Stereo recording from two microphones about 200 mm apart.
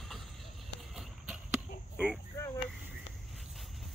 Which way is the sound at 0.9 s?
5° right (ahead or behind).